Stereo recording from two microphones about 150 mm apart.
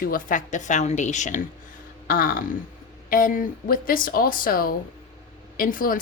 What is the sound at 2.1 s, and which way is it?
A woman's voice, 70° left (ahead or behind).